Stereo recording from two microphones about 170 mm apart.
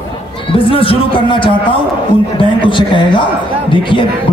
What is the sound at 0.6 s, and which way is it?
A man's voice, 35° left (ahead or behind).